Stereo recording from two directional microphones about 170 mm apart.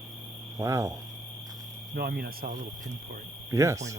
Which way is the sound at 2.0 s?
65° right (ahead or behind).